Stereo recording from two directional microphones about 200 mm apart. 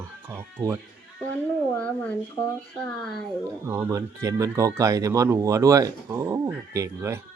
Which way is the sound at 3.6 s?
15° right (ahead or behind).